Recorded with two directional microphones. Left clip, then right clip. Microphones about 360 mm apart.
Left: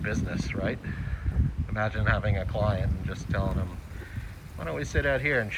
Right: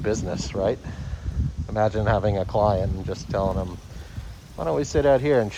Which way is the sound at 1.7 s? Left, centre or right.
Centre.